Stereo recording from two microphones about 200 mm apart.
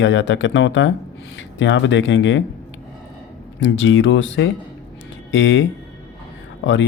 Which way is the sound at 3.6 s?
70° left (ahead or behind).